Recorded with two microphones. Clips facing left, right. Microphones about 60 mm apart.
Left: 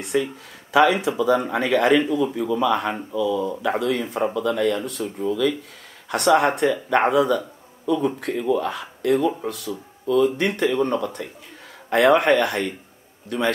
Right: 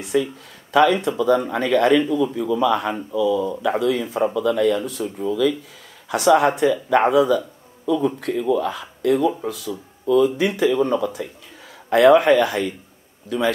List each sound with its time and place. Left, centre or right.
0.0 s speech: centre